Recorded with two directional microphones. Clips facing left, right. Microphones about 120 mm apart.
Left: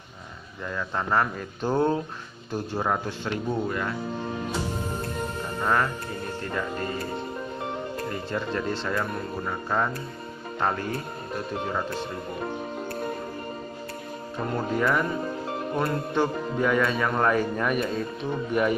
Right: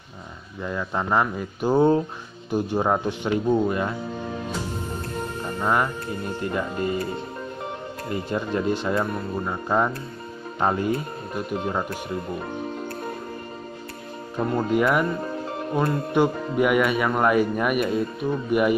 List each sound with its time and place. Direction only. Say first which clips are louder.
0.7 s speech: right 3 dB; 15° right (ahead or behind)
5.6 s speech: right 2 dB; 15° right (ahead or behind)
8.1 s speech: right 7 dB; 15° right (ahead or behind)
14.7 s speech: right 3 dB; 15° right (ahead or behind)